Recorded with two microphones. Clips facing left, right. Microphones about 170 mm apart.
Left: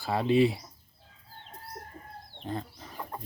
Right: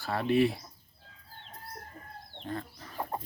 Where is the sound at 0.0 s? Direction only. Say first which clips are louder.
Left 2 dB; 15° left (ahead or behind).